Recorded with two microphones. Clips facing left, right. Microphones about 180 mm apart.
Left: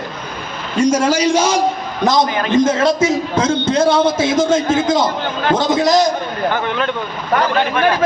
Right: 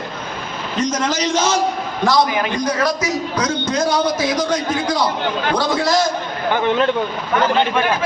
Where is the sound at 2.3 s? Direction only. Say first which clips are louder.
Left 1 dB; 10° right (ahead or behind).